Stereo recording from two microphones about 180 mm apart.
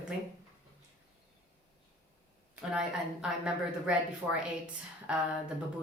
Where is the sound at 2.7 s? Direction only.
5° right (ahead or behind).